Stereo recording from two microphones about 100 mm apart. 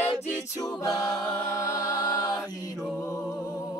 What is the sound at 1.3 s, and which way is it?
Music, 30° left (ahead or behind).